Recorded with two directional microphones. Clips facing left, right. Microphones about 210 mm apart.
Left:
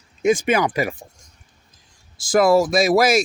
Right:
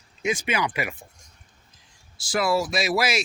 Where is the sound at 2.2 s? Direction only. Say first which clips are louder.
Left 8 dB; 45° left (ahead or behind).